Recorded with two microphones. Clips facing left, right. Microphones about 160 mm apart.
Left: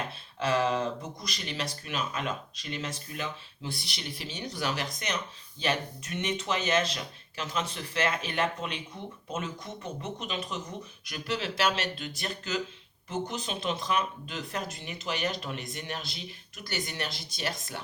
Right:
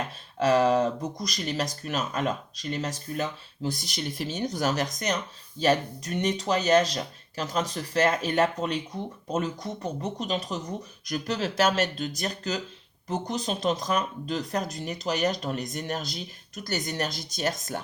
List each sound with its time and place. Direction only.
0.3 s speech: 40° right (ahead or behind)